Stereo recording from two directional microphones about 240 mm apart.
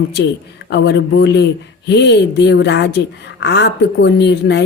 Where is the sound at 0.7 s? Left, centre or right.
Left.